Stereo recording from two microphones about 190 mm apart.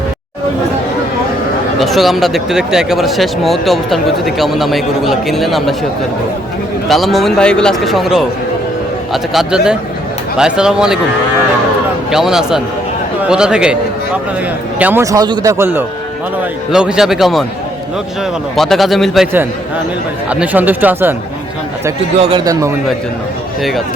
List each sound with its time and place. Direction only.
1.8 s speech: centre (ahead or behind)
6.8 s speech: centre (ahead or behind)
12.1 s speech: 5° right (ahead or behind)
14.8 s a man's voice: 10° right (ahead or behind)
20.3 s a man's voice: 5° right (ahead or behind)
22.2 s a man's voice: 25° right (ahead or behind)